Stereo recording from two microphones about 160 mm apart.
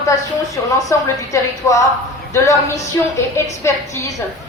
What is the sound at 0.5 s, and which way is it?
A woman's voice, 20° left (ahead or behind).